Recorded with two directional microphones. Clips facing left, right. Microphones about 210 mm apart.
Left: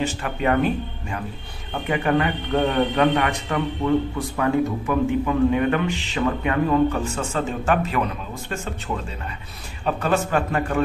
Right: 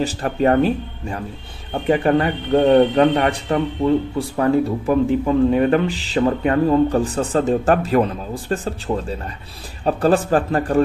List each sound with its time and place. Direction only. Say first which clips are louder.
0.0 s speech: right 5 dB; 35° right (ahead or behind)